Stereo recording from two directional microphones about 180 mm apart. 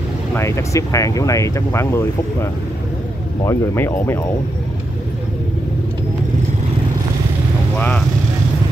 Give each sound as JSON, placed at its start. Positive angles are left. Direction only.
{"t": 0.4, "sound": "speech", "side_deg": 15}
{"t": 3.4, "sound": "speech", "side_deg": 15}